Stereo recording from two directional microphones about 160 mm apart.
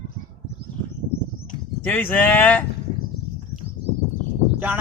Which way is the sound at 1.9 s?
10° left (ahead or behind).